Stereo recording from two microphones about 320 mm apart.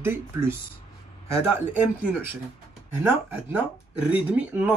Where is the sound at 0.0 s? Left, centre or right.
Centre.